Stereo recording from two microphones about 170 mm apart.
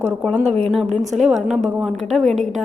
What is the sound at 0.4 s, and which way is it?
Speech, 35° right (ahead or behind).